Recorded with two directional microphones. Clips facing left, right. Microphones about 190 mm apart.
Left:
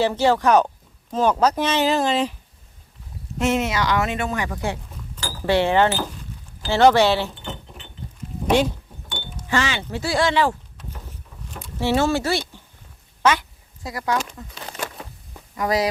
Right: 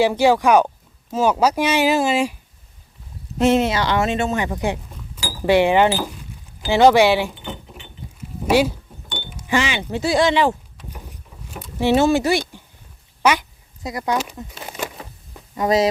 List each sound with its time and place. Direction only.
0.0 s speech: 10° right (ahead or behind)
3.3 s speech: 30° right (ahead or behind)
4.9 s a sound: 10° right (ahead or behind)
6.6 s speech: 15° right (ahead or behind)
13.8 s speech: 20° right (ahead or behind)
14.2 s a sound: 10° right (ahead or behind)
15.5 s speech: 25° right (ahead or behind)